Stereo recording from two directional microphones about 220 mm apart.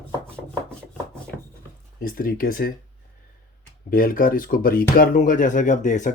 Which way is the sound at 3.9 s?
40° left (ahead or behind).